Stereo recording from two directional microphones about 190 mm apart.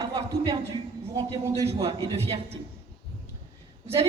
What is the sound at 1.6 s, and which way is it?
Speech, 30° right (ahead or behind).